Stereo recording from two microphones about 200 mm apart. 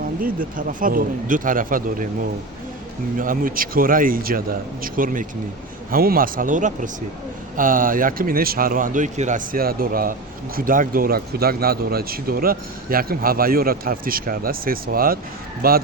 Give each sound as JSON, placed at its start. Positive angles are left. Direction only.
{"t": 0.2, "sound": "speech", "side_deg": -45}
{"t": 3.2, "sound": "speech", "side_deg": -45}